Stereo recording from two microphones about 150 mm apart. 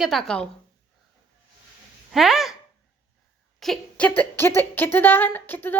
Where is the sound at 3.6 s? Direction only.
5° left (ahead or behind).